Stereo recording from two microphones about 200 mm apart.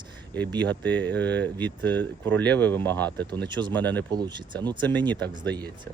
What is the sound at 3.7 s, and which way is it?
Speech, 10° left (ahead or behind).